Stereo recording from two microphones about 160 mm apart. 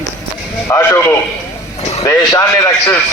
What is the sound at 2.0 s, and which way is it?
Speech, 25° left (ahead or behind).